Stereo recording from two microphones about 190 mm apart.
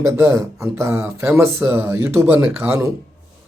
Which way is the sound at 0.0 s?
15° right (ahead or behind).